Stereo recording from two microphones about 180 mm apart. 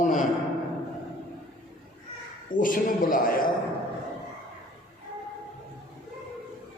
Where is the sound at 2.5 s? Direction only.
50° left (ahead or behind).